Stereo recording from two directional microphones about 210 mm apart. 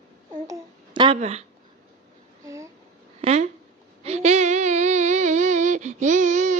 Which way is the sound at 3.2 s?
30° right (ahead or behind).